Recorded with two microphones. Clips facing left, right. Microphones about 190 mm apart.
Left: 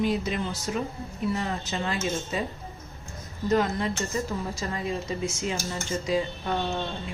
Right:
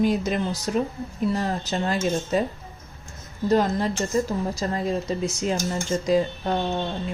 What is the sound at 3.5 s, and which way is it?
A woman's voice, 35° right (ahead or behind).